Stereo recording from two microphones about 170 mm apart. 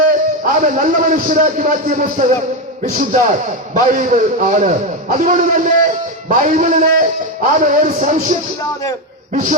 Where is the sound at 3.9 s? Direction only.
50° right (ahead or behind).